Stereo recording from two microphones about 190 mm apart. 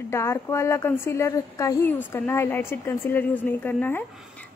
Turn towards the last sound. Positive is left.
turn(degrees=10)  # may be behind; listen again after turning